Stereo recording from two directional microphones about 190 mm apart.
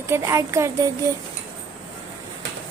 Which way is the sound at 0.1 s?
15° right (ahead or behind).